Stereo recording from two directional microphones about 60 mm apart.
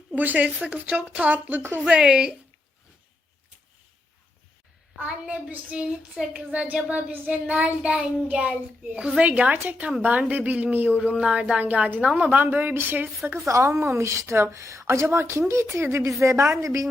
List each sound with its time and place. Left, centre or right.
0.2 s speech: right
1.8 s a woman's voice: centre
5.5 s a woman's voice: right
12.4 s a woman's voice: right
13.4 s a woman's voice: right